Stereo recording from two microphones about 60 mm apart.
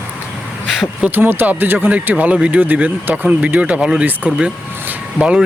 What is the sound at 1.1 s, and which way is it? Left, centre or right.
Speech, right.